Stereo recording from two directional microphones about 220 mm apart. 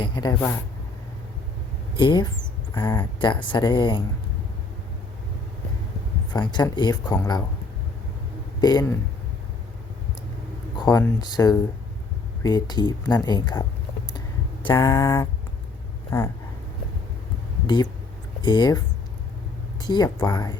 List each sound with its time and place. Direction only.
0.0 s speech: 20° left (ahead or behind)
2.0 s speech: 20° left (ahead or behind)
6.3 s speech: 20° left (ahead or behind)
8.6 s speech: 20° left (ahead or behind)
10.8 s speech: 15° left (ahead or behind)
14.7 s speech: 15° left (ahead or behind)
18.4 s speech: 20° left (ahead or behind)
19.8 s speech: 20° left (ahead or behind)